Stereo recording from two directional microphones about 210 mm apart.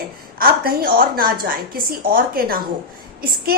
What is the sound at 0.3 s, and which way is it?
A woman's voice, 45° right (ahead or behind).